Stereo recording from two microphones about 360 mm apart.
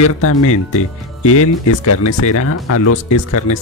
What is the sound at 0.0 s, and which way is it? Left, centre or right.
Speech, left.